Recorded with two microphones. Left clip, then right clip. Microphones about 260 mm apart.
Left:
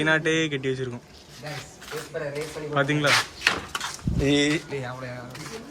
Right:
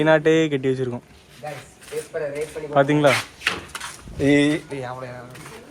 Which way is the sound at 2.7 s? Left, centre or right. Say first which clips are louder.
Right 6 dB; centre.